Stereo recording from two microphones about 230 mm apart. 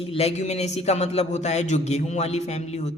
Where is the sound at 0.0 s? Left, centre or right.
Left.